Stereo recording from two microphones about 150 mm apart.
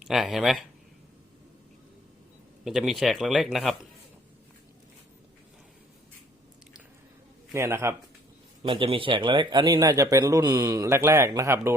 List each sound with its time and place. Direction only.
0.0 s speech: centre (ahead or behind)
2.6 s speech: centre (ahead or behind)
7.5 s a man's voice: 15° right (ahead or behind)
8.6 s a man's voice: 35° right (ahead or behind); by 11.7 s 20° right (ahead or behind)